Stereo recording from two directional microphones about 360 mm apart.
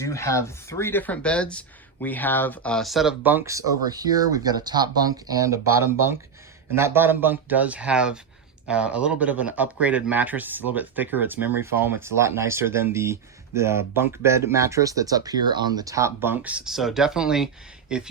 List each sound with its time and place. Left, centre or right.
0.0 s speech: centre